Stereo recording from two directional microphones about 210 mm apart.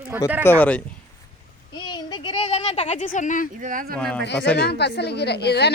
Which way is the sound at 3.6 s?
40° right (ahead or behind).